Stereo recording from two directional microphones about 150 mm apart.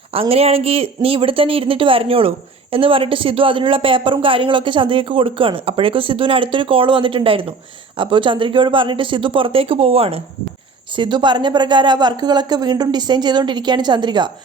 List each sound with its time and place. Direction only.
0.1 s speech: 40° right (ahead or behind)